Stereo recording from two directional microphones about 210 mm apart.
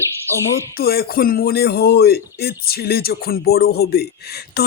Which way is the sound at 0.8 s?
45° left (ahead or behind).